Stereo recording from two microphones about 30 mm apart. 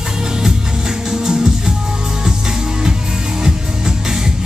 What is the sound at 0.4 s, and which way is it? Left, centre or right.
Music, right.